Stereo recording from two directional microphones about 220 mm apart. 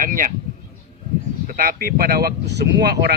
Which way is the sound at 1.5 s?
45° right (ahead or behind).